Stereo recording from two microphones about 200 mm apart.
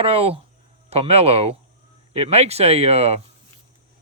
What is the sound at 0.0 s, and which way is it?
Speech, 30° right (ahead or behind).